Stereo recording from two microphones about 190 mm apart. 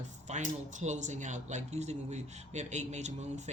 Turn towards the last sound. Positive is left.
turn(degrees=-35)  # may be behind; listen again after turning